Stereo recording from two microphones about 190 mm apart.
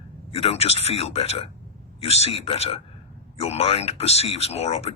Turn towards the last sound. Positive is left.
turn(degrees=35)  # may be behind; listen again after turning